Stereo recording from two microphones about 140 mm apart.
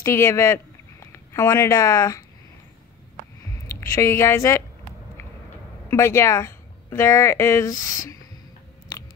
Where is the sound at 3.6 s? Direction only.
20° left (ahead or behind).